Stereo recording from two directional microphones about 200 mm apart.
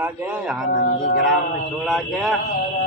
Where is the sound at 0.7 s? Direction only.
45° left (ahead or behind).